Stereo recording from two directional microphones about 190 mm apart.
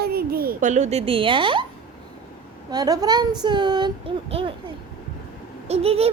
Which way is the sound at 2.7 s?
20° right (ahead or behind).